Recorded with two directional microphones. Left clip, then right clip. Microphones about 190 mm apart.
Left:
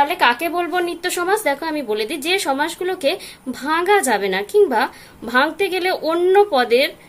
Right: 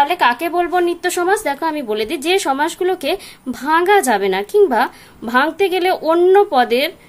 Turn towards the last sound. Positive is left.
turn(degrees=-30)  # may be behind; listen again after turning